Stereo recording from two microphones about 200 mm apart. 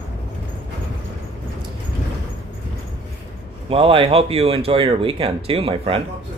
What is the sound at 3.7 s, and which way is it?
Speech, 25° right (ahead or behind).